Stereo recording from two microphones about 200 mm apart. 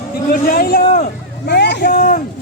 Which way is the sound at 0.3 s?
45° left (ahead or behind).